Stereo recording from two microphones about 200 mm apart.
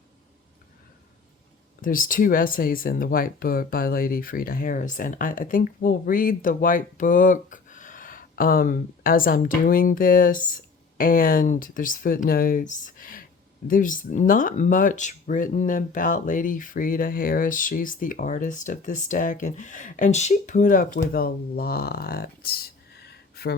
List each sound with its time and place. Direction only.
1.8 s speech: 45° left (ahead or behind)